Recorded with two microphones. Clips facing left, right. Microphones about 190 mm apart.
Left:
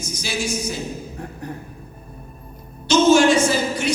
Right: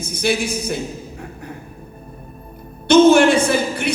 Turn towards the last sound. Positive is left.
turn(degrees=-60)  # may be behind; listen again after turning